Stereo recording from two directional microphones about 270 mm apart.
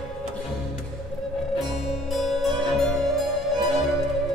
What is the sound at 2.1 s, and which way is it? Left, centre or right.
Music, centre.